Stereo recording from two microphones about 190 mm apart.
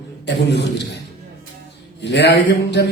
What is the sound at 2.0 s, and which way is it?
Speech, 65° left (ahead or behind).